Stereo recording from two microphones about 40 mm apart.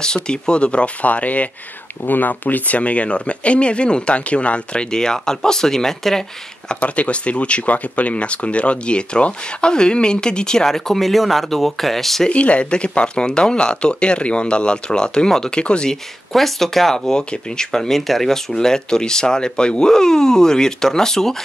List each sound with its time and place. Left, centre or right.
0.0 s speech: left
2.0 s speech: left
4.9 s speech: centre
6.8 s speech: left
10.7 s speech: centre
12.3 s speech: left
15.6 s speech: left
15.9 s speech: centre